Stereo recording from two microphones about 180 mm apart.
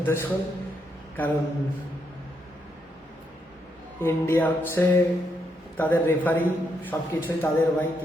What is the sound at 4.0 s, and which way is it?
A man's voice, 15° left (ahead or behind).